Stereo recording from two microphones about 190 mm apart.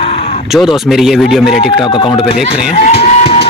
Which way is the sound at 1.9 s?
25° left (ahead or behind).